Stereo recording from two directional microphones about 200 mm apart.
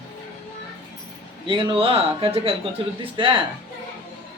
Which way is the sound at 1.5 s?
25° right (ahead or behind).